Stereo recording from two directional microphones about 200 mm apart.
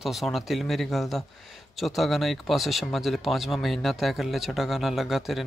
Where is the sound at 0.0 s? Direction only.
Centre (ahead or behind).